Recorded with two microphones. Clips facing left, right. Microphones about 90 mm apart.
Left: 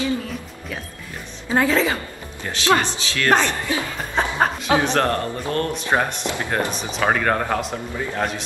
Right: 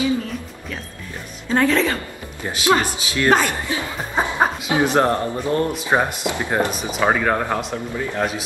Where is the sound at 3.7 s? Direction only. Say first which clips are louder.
Even; 15° right (ahead or behind).